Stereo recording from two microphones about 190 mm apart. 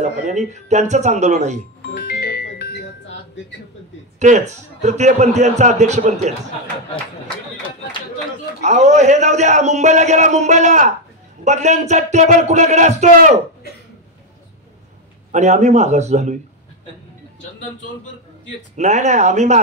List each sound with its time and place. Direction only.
0.0 s a man's voice: 40° right (ahead or behind)
1.8 s music: 55° left (ahead or behind)
4.2 s a man's voice: 40° right (ahead or behind)
8.5 s a man's voice: 40° right (ahead or behind)
15.3 s a man's voice: 40° right (ahead or behind)
18.8 s a man's voice: 40° right (ahead or behind)